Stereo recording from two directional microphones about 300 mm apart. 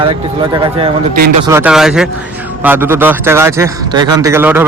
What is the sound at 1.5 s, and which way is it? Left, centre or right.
A man's voice, centre.